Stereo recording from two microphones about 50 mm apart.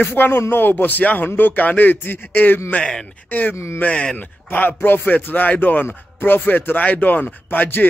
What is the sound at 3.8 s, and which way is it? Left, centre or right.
Speech, left.